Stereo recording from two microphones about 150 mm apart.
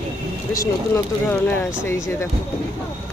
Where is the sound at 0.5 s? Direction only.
20° left (ahead or behind).